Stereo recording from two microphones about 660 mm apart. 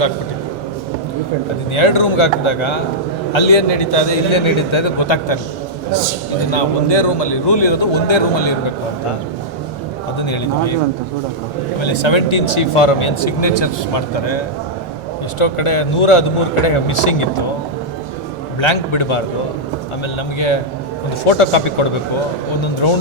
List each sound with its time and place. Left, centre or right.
1.7 s speech: left
6.5 s speech: left
10.2 s speech: left
11.8 s speech: left
15.4 s speech: left
18.6 s speech: left
21.2 s speech: left